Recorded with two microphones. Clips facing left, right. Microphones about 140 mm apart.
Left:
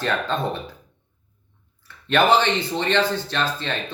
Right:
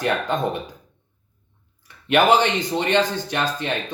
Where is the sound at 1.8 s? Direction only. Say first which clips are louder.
Right 1 dB; 15° right (ahead or behind).